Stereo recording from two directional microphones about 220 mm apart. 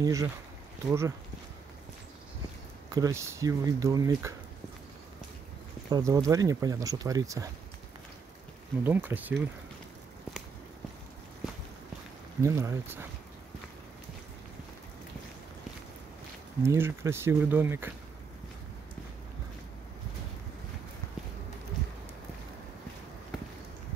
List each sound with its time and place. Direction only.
0.0 s speech: 15° right (ahead or behind)
2.9 s speech: 15° right (ahead or behind)
5.9 s speech: 15° right (ahead or behind)
8.8 s speech: 10° right (ahead or behind)
12.4 s speech: 15° right (ahead or behind)
16.6 s speech: 10° right (ahead or behind)